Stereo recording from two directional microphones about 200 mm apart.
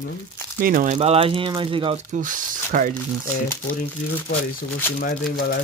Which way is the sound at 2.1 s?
40° right (ahead or behind).